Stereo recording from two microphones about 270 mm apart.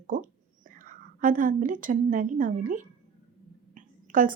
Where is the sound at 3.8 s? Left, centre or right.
Right.